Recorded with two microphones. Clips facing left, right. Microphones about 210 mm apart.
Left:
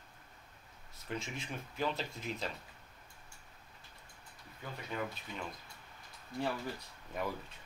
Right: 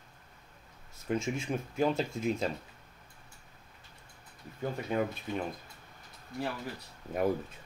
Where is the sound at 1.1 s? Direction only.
45° right (ahead or behind).